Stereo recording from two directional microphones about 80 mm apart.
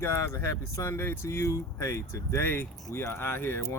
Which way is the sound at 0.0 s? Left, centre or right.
Left.